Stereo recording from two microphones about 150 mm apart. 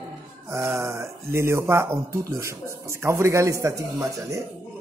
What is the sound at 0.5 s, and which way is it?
A man's voice, 20° right (ahead or behind).